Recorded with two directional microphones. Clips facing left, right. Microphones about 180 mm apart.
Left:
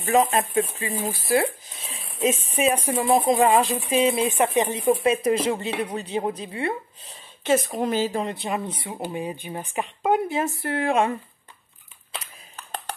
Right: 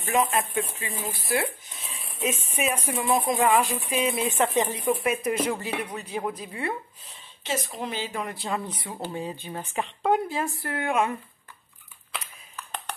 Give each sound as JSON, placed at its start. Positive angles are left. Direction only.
{"t": 0.1, "sound": "speech", "side_deg": 35}
{"t": 7.4, "sound": "speech", "side_deg": 50}
{"t": 8.2, "sound": "speech", "side_deg": 20}
{"t": 12.1, "sound": "a sound", "side_deg": 35}